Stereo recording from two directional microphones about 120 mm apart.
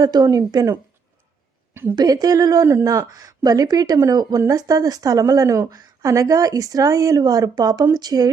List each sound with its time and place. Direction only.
0.0 s speech: 30° right (ahead or behind)
1.7 s speech: 20° right (ahead or behind)
2.0 s speech: 30° right (ahead or behind)